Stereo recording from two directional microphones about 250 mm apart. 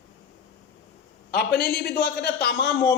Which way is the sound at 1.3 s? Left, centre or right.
Left.